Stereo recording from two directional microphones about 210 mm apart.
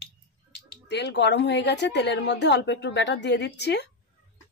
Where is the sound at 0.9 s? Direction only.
55° left (ahead or behind).